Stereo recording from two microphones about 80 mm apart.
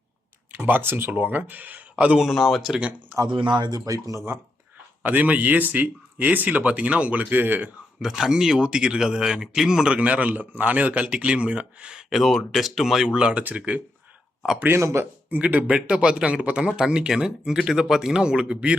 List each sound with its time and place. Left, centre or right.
0.5 s a man's voice: right; by 2.7 s centre
3.3 s speech: right
5.0 s a man's voice: centre
8.0 s speech: centre
14.8 s speech: right
15.3 s speech: centre